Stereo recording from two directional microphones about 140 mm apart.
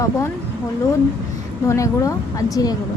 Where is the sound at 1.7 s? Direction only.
25° left (ahead or behind).